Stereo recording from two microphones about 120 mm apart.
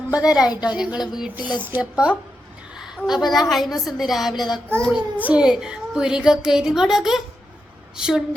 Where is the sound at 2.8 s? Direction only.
5° right (ahead or behind).